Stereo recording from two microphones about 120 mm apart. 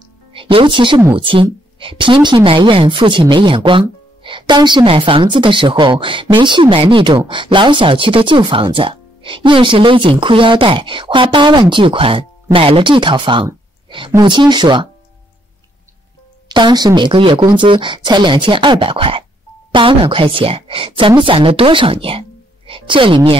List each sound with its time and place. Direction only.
0.3 s a woman's voice: 50° right (ahead or behind)
16.4 s speech: 40° right (ahead or behind)